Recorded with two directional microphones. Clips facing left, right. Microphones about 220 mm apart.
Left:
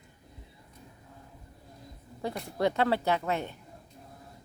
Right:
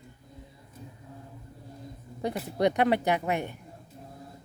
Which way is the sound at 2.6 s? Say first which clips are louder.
Right 3 dB; 20° right (ahead or behind).